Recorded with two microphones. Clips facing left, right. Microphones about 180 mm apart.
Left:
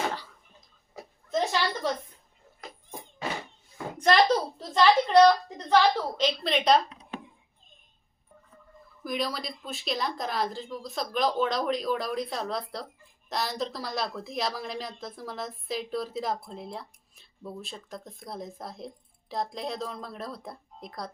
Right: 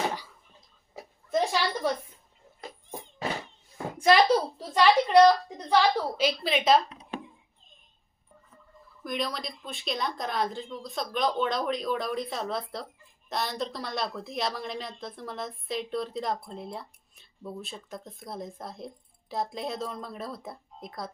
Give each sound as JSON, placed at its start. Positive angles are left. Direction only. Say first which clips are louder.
{"t": 1.3, "sound": "a sound", "louder": "right 1 dB", "side_deg": -10}
{"t": 3.9, "sound": "a woman's voice", "louder": "right 1 dB", "side_deg": -5}
{"t": 9.0, "sound": "a woman's voice", "louder": "left 1 dB", "side_deg": 0}